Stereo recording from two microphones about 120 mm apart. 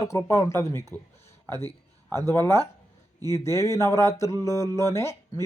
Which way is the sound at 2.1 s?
20° left (ahead or behind).